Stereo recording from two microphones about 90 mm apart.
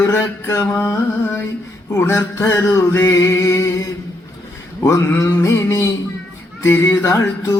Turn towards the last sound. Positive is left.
turn(degrees=35)  # may be behind; listen again after turning